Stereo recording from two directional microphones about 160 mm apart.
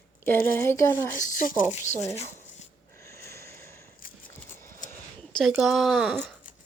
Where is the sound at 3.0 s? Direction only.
15° left (ahead or behind).